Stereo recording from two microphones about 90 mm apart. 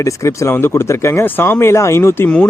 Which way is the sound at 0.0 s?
35° left (ahead or behind).